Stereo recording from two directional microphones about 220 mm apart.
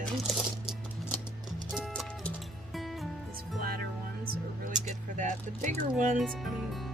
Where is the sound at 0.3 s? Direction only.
Centre (ahead or behind).